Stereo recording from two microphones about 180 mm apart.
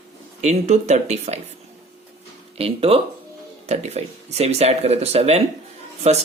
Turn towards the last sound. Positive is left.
turn(degrees=-35)  # may be behind; listen again after turning